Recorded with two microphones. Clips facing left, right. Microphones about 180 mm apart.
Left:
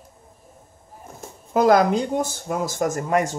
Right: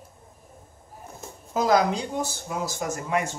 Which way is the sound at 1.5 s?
55° left (ahead or behind).